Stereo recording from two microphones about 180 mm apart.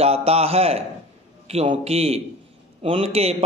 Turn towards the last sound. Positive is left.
turn(degrees=-35)  # may be behind; listen again after turning